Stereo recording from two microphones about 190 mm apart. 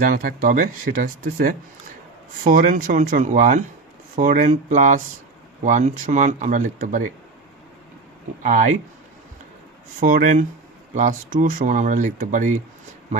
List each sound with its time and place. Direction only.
0.0 s speech: 50° right (ahead or behind)
8.4 s speech: 40° right (ahead or behind)
10.0 s speech: 45° right (ahead or behind)